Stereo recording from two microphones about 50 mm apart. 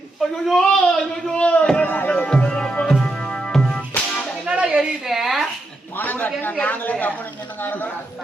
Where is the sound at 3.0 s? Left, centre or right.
Centre.